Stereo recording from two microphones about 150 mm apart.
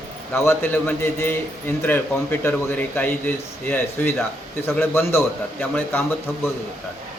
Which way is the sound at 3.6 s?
15° left (ahead or behind).